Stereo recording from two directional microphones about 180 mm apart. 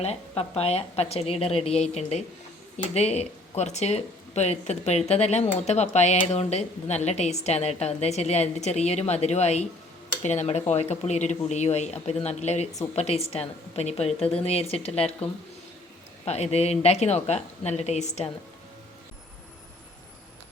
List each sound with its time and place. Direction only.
0.0 s speech: 35° left (ahead or behind)
16.2 s speech: 35° left (ahead or behind)